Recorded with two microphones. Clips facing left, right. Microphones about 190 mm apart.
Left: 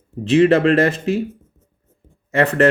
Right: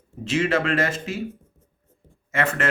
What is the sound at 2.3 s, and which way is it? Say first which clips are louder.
Speech: left 9 dB; 35° left (ahead or behind).